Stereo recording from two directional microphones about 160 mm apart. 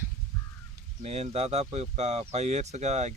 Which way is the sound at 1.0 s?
40° right (ahead or behind).